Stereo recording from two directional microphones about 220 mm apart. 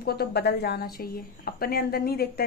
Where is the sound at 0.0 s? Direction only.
45° left (ahead or behind).